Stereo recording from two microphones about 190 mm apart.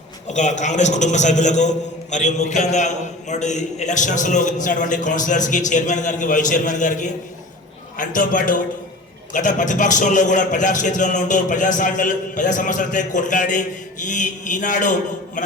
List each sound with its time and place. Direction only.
0.3 s a man's voice: 40° left (ahead or behind)
15.4 s mantra: 40° left (ahead or behind)